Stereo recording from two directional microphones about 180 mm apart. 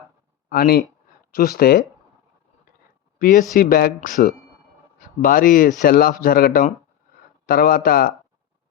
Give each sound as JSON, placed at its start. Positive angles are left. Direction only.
{"t": 0.5, "sound": "speech", "side_deg": 60}
{"t": 3.2, "sound": "speech", "side_deg": 50}